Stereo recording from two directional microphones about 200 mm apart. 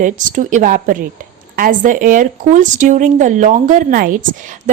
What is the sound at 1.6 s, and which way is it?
A woman's voice, 40° right (ahead or behind).